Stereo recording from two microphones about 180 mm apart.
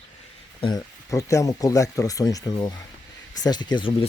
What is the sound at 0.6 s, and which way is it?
Speech, 20° left (ahead or behind).